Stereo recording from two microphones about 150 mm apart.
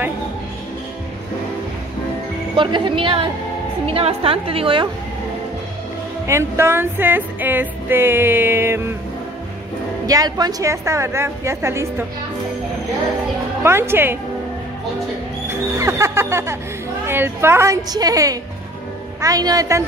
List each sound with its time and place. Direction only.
2.5 s a woman's voice: 35° right (ahead or behind)
6.2 s music: 20° right (ahead or behind)
10.0 s a woman's voice: 25° right (ahead or behind)
13.6 s music: 15° right (ahead or behind)
15.8 s music: 20° right (ahead or behind)
17.0 s a woman's voice: 15° right (ahead or behind)